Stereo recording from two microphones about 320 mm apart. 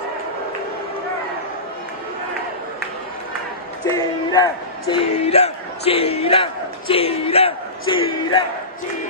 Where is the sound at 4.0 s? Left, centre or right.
Centre.